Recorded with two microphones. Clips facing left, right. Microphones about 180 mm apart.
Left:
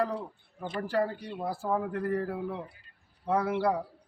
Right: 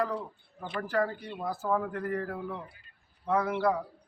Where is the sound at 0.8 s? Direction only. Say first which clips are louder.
Even; 30° left (ahead or behind).